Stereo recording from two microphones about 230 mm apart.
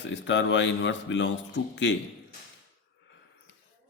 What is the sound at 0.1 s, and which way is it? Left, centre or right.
Speech, left.